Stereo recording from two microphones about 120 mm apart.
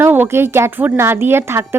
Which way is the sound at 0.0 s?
20° right (ahead or behind).